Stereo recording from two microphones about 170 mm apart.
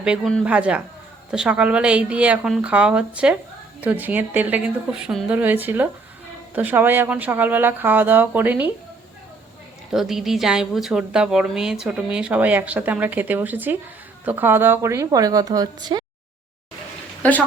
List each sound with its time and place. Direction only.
0.0 s a woman's voice: centre (ahead or behind)
9.9 s a woman's voice: centre (ahead or behind); by 16.0 s 25° right (ahead or behind)